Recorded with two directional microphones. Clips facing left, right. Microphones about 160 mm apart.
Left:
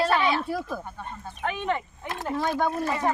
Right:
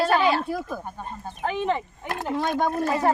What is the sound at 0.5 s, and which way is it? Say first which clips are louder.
Speech: right 1 dB; centre (ahead or behind).